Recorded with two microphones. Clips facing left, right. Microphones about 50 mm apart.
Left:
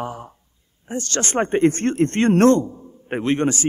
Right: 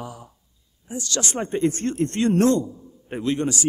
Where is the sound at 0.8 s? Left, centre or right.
Left.